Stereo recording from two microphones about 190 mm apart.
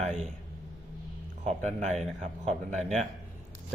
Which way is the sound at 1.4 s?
35° right (ahead or behind).